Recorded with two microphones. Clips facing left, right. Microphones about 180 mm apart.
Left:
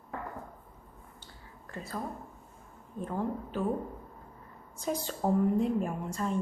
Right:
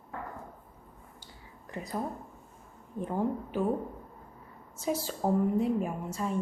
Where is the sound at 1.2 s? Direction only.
15° right (ahead or behind).